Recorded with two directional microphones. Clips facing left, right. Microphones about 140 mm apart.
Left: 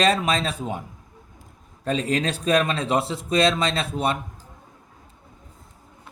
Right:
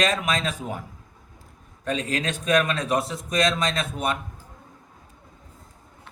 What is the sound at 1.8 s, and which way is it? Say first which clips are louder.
Speech: left 3 dB; 30° left (ahead or behind).